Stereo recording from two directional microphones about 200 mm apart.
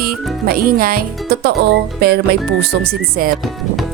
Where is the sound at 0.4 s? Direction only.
45° right (ahead or behind).